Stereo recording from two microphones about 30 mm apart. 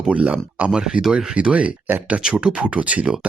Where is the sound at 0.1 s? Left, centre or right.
Right.